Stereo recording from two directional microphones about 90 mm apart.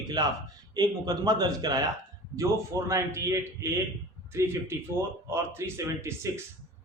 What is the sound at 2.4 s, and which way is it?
A man's voice, 35° right (ahead or behind).